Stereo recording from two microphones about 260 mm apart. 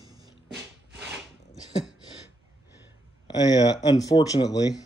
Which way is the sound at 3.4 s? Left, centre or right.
Centre.